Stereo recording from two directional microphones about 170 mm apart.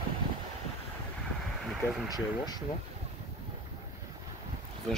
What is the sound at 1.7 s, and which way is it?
Speech, centre (ahead or behind).